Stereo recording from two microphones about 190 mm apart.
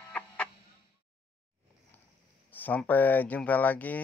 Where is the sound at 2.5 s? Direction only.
10° left (ahead or behind).